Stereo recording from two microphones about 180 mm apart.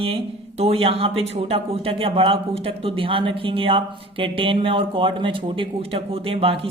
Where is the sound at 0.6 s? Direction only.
35° right (ahead or behind).